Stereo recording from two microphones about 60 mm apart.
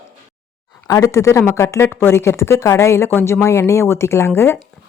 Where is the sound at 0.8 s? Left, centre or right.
Left.